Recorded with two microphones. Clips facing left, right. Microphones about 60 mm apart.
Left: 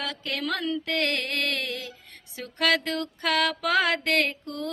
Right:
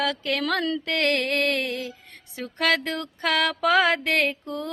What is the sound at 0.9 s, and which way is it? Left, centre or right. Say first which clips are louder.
Mantra: right 6 dB; right.